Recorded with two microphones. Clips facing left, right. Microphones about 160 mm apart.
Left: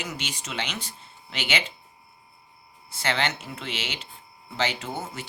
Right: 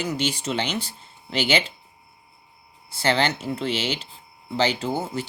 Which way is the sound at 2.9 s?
35° right (ahead or behind).